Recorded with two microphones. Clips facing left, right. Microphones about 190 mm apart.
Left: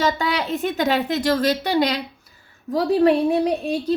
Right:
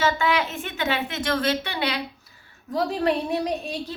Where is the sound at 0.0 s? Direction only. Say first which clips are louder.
Left 1 dB; 35° left (ahead or behind).